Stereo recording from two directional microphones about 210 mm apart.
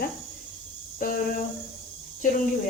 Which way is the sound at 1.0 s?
40° left (ahead or behind).